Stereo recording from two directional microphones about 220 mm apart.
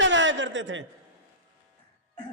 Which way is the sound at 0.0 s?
55° right (ahead or behind).